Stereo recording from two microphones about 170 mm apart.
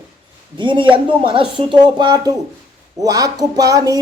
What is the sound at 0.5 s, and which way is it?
Speech, 30° right (ahead or behind).